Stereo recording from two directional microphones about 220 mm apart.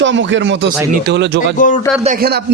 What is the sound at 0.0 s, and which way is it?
A man's voice, 55° right (ahead or behind).